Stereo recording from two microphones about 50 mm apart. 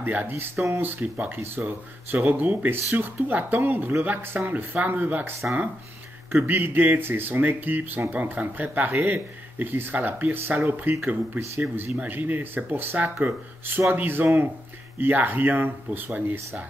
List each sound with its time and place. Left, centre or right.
0.0 s speech: right
6.3 s speech: right
11.7 s speech: right